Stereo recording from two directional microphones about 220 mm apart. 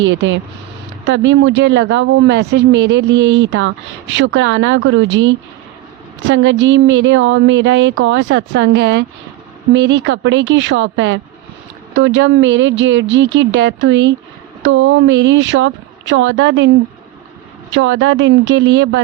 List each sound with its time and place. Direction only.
0.0 s speech: 55° right (ahead or behind)
17.7 s speech: 60° right (ahead or behind)